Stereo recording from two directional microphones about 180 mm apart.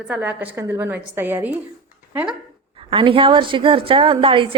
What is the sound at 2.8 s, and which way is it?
A woman's voice, 30° right (ahead or behind).